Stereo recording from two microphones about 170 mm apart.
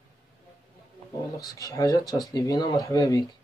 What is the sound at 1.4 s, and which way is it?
Speech, 20° left (ahead or behind).